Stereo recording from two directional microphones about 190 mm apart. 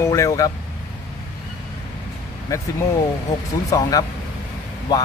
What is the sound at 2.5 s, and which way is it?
Speech, 15° left (ahead or behind).